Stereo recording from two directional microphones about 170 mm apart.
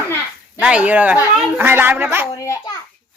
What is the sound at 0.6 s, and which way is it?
Speech, 5° right (ahead or behind).